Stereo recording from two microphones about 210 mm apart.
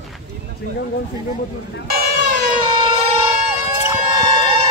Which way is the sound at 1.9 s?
45° right (ahead or behind).